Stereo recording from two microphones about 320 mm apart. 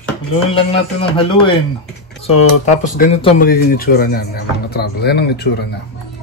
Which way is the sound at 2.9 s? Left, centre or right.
Left.